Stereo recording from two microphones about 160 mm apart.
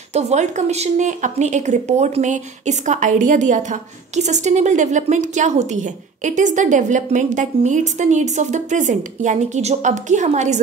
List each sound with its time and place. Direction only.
0.1 s a woman's voice: 45° right (ahead or behind)